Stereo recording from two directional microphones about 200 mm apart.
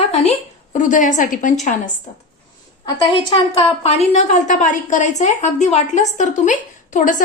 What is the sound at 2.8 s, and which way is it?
A woman's voice, 25° left (ahead or behind).